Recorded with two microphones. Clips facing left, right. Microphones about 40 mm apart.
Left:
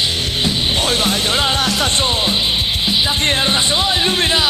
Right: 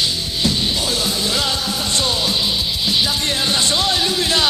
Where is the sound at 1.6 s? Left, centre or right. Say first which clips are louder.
Left 6 dB; left.